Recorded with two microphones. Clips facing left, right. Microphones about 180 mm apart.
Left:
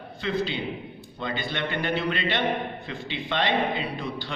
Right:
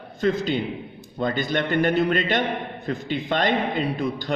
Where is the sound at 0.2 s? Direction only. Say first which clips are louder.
Right 5 dB; 45° right (ahead or behind).